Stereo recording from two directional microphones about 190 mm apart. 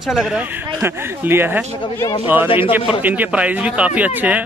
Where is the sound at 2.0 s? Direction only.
20° left (ahead or behind).